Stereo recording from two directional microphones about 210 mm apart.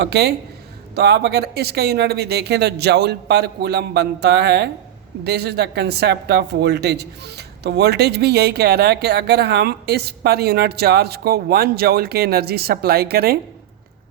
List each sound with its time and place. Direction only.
0.0 s speech: 50° right (ahead or behind)